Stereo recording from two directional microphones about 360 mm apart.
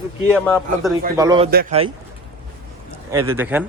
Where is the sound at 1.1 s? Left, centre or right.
Centre.